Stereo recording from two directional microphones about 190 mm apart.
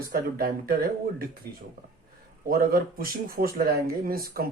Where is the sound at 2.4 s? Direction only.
50° right (ahead or behind).